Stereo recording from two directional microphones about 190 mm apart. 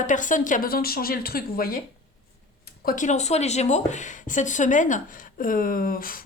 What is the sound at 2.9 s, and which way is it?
Speech, 40° left (ahead or behind).